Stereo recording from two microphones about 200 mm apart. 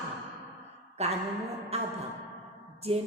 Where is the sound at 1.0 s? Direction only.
30° right (ahead or behind).